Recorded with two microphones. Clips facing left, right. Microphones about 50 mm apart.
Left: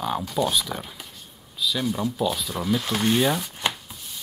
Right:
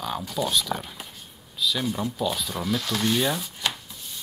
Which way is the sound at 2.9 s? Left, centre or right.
Left.